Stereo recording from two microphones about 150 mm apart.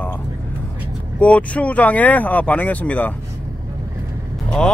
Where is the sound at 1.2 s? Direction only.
10° left (ahead or behind).